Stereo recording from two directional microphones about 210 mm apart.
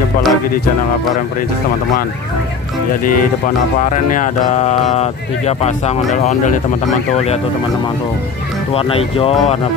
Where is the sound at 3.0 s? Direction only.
40° left (ahead or behind).